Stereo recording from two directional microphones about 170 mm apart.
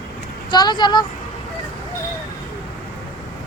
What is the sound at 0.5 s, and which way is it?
Speech, 25° left (ahead or behind).